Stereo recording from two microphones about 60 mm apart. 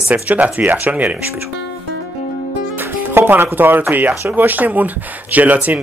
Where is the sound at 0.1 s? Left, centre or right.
Right.